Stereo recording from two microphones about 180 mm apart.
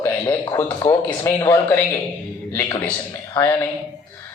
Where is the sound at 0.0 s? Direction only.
10° left (ahead or behind).